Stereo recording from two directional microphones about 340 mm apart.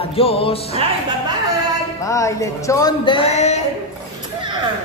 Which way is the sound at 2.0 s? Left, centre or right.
Centre.